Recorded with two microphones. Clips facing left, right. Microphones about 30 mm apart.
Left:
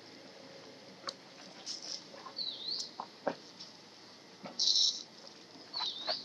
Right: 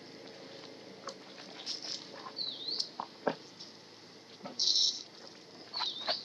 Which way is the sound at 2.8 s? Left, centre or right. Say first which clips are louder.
Right 5 dB; right.